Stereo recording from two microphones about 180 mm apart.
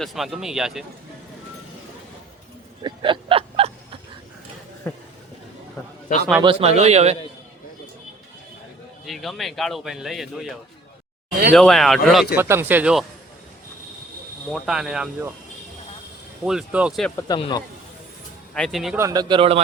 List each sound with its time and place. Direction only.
0.0 s speech: centre (ahead or behind)
2.8 s a sound: 30° right (ahead or behind)
4.9 s speech: 10° left (ahead or behind)
6.4 s a man's voice: 30° right (ahead or behind)
9.0 s speech: centre (ahead or behind)
11.5 s speech: centre (ahead or behind)
12.4 s speech: 15° right (ahead or behind)
14.5 s speech: 5° right (ahead or behind)
16.5 s speech: 5° right (ahead or behind)
17.2 s speech: 25° left (ahead or behind)
18.5 s speech: centre (ahead or behind)
18.9 s speech: 20° right (ahead or behind)